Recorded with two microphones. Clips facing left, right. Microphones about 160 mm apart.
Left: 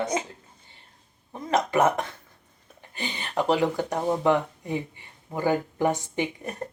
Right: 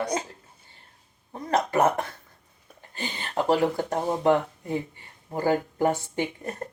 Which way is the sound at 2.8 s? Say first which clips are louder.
Even; 15° left (ahead or behind).